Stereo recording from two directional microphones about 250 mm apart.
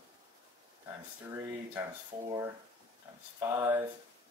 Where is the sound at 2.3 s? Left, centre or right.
Centre.